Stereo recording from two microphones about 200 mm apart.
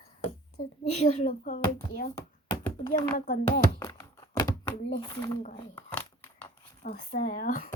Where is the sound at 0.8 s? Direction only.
40° left (ahead or behind).